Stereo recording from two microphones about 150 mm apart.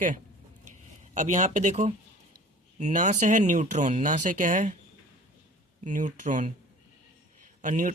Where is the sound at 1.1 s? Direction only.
55° right (ahead or behind).